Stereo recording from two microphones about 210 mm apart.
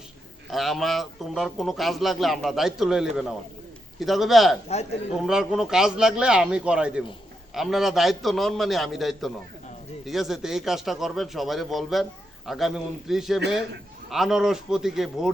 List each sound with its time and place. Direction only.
0.5 s a man's voice: centre (ahead or behind)
4.7 s a man's voice: 30° left (ahead or behind)
5.2 s a man's voice: 5° right (ahead or behind)